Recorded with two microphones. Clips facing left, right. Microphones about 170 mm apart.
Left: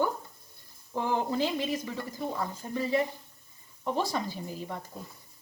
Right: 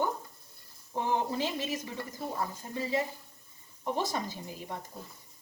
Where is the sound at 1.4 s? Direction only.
15° left (ahead or behind).